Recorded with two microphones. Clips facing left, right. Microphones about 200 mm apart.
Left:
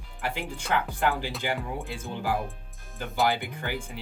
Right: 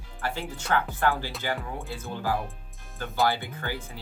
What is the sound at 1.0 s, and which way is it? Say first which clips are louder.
Speech: even; 15° left (ahead or behind).